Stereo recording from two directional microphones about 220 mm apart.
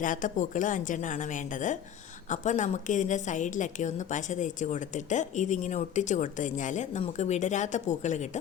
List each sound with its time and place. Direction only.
0.0 s a woman's voice: 35° left (ahead or behind)
2.3 s a woman's voice: 35° left (ahead or behind)